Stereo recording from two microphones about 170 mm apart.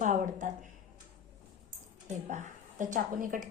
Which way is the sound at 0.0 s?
45° right (ahead or behind).